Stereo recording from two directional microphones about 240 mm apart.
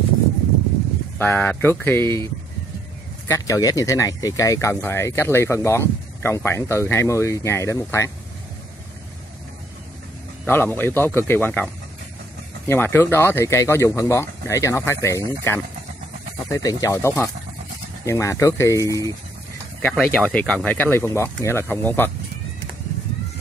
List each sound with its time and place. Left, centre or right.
1.1 s speech: centre
3.3 s speech: centre
10.4 s speech: centre